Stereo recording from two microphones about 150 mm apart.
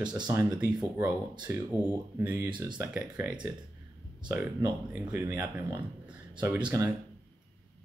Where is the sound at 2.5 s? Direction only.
30° right (ahead or behind).